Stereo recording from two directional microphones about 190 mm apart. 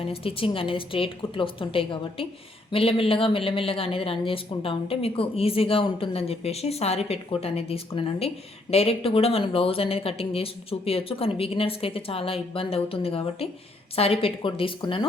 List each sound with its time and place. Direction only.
0.0 s speech: 30° left (ahead or behind)